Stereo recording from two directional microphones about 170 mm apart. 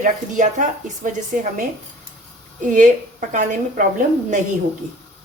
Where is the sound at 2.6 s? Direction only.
50° right (ahead or behind).